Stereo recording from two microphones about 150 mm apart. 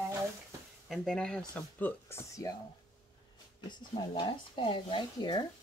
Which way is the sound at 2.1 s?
20° left (ahead or behind).